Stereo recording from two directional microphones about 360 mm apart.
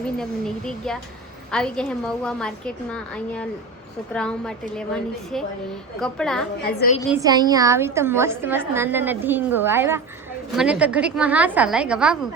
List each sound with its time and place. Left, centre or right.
0.2 s a woman's voice: centre
6.6 s a woman's voice: left
7.1 s a woman's voice: centre